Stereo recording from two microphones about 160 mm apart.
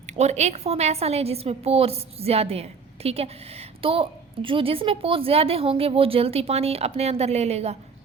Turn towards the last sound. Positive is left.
turn(degrees=-40)  # may be behind; listen again after turning